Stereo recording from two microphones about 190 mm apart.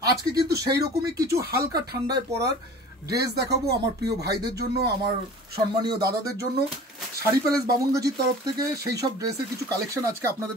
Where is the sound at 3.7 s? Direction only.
60° right (ahead or behind).